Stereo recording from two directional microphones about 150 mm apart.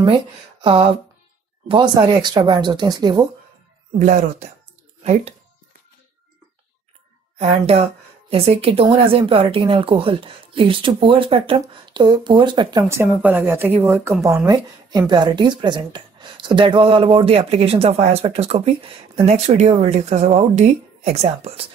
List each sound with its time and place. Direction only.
0.0 s speech: 35° right (ahead or behind)
4.0 s speech: 55° right (ahead or behind)
7.3 s a woman's voice: 45° right (ahead or behind)
12.8 s a woman's voice: 20° right (ahead or behind); by 21.6 s 45° right (ahead or behind)